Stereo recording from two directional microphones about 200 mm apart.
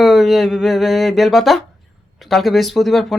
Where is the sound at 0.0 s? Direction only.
Centre (ahead or behind).